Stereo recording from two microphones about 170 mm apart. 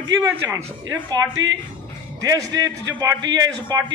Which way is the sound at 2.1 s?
20° right (ahead or behind).